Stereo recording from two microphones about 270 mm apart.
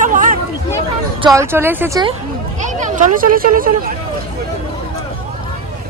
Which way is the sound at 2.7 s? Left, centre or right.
Right.